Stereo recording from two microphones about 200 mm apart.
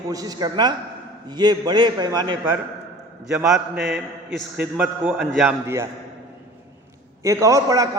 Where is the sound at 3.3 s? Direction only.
Centre (ahead or behind).